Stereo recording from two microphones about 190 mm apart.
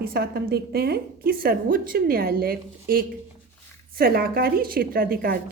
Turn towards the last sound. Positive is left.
turn(degrees=-50)  # may be behind; listen again after turning